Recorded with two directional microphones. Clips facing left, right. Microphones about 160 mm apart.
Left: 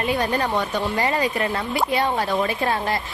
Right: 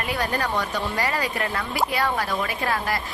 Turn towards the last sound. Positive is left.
turn(degrees=25)  # may be behind; listen again after turning